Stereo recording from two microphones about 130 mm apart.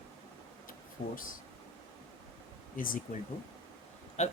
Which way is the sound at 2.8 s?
90° left.